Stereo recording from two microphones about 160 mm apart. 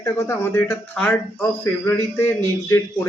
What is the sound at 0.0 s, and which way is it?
Speech, 15° left (ahead or behind).